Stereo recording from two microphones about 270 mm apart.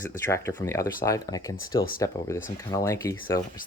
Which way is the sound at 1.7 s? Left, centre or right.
Left.